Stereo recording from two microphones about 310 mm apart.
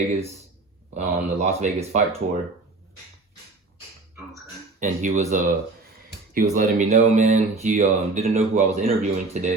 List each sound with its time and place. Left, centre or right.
0.9 s speech: right
4.8 s speech: right